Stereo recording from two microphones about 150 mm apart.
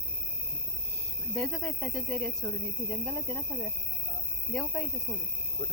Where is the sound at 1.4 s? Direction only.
5° left (ahead or behind).